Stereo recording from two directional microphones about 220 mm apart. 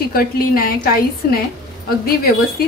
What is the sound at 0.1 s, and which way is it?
Speech, 45° left (ahead or behind).